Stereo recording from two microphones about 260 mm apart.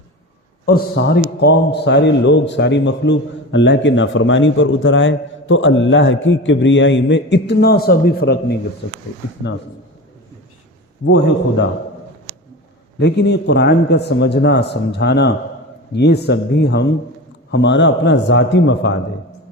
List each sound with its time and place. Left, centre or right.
0.6 s a man's voice: left
13.0 s a man's voice: left